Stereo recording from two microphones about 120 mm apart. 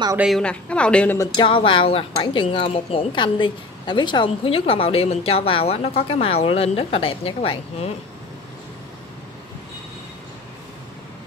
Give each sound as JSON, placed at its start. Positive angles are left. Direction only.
{"t": 0.4, "sound": "a woman's voice", "side_deg": 10}
{"t": 1.3, "sound": "speech", "side_deg": 45}